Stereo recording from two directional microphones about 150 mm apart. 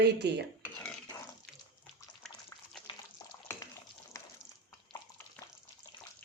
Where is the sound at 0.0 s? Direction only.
90° right.